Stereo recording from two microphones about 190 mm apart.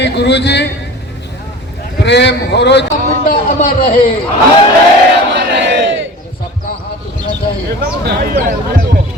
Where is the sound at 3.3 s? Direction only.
50° left (ahead or behind).